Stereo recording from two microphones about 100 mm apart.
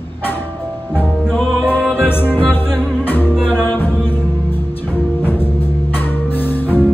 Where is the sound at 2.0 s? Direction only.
20° left (ahead or behind).